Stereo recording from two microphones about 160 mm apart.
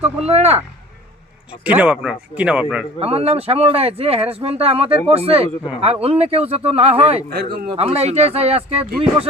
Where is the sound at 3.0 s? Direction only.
40° right (ahead or behind).